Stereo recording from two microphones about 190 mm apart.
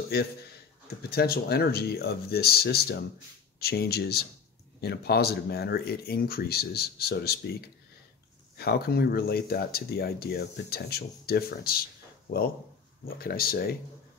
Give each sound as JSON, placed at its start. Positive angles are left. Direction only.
{"t": 0.1, "sound": "speech", "side_deg": 55}